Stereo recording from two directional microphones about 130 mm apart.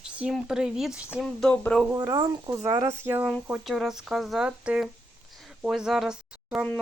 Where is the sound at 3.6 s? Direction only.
Centre (ahead or behind).